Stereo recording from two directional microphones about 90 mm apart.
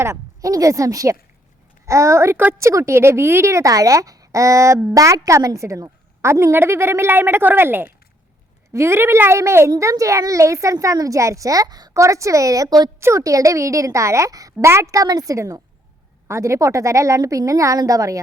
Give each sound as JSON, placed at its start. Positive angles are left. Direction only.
{"t": 0.0, "sound": "a child's voice", "side_deg": -35}
{"t": 13.0, "sound": "a child's voice", "side_deg": -35}